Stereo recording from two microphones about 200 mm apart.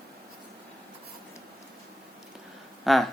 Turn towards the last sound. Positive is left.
turn(degrees=0)  # may be behind; listen again after turning